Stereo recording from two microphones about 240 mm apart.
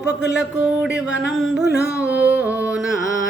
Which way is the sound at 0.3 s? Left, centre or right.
Centre.